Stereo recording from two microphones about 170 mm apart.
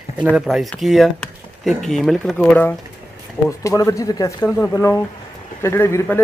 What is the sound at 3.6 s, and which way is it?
Speech, 20° left (ahead or behind).